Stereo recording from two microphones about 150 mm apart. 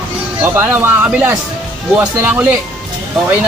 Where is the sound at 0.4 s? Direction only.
15° right (ahead or behind).